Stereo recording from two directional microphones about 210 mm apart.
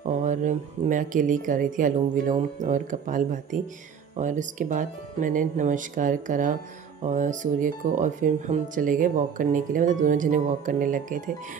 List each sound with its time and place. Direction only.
0.1 s speech: 35° right (ahead or behind)